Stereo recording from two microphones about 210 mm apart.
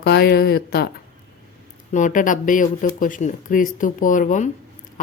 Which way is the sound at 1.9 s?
40° left (ahead or behind).